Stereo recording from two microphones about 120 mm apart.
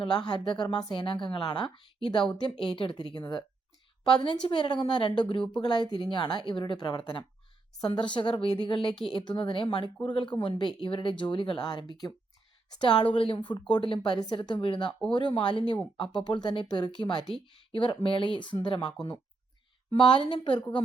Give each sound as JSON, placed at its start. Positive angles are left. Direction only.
{"t": 0.0, "sound": "speech", "side_deg": 35}